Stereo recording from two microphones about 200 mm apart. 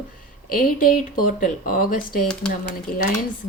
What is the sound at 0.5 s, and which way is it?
Speech, 45° left (ahead or behind).